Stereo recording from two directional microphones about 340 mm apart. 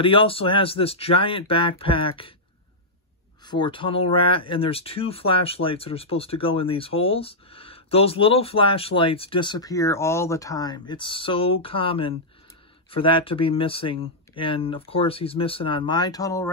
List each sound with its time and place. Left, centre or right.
0.0 s speech: centre
3.4 s speech: centre